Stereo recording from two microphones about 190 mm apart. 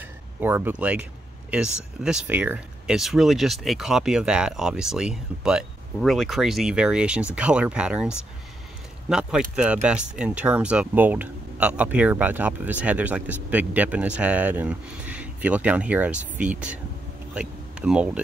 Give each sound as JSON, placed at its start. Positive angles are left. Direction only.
{"t": 0.4, "sound": "speech", "side_deg": -10}
{"t": 9.6, "sound": "speech", "side_deg": -5}